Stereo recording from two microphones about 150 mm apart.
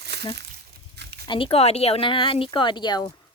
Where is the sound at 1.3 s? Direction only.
35° left (ahead or behind).